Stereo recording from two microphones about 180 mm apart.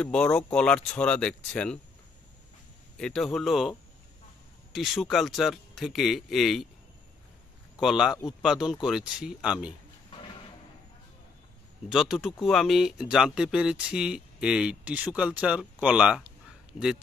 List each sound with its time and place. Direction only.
0.0 s speech: 5° left (ahead or behind)
3.0 s speech: centre (ahead or behind)
4.7 s speech: centre (ahead or behind)
7.7 s speech: centre (ahead or behind)
11.9 s speech: 5° right (ahead or behind)